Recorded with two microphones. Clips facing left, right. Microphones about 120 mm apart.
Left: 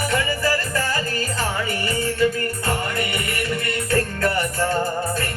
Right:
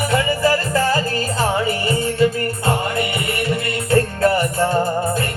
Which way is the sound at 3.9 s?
25° right (ahead or behind).